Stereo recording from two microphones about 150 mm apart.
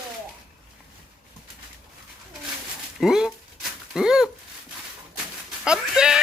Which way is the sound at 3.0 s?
5° right (ahead or behind).